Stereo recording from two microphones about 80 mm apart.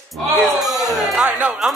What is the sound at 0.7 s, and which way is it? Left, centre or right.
Speech, right.